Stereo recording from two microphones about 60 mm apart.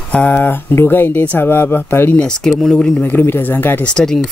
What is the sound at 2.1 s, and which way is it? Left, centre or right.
Speech, centre.